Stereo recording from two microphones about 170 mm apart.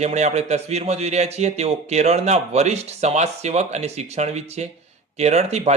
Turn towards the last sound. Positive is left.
turn(degrees=-40)  # may be behind; listen again after turning